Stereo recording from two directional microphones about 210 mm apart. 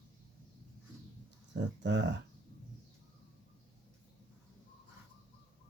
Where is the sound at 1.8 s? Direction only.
55° right (ahead or behind).